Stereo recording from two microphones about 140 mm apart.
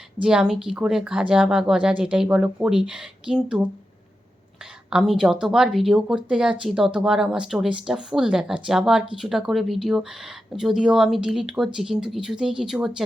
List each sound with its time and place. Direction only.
0.2 s speech: 5° right (ahead or behind)
4.9 s speech: 5° right (ahead or behind)